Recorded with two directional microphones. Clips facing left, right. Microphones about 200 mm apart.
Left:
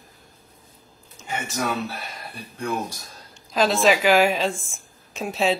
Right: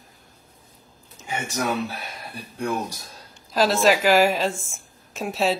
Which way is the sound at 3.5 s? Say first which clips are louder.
Even; centre (ahead or behind).